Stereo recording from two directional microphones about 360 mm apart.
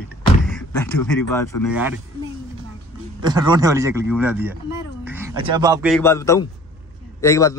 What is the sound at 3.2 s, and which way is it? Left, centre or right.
A man's voice, centre.